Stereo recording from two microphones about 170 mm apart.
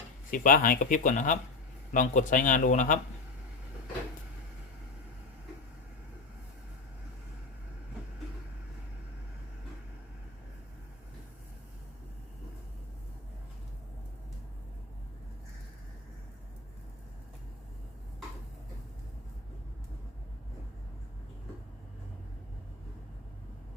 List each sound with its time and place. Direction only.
0.3 s speech: 55° left (ahead or behind)